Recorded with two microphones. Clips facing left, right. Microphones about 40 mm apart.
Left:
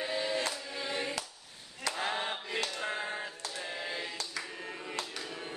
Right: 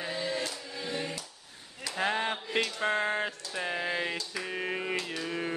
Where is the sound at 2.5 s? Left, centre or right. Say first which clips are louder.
Right 7 dB; right.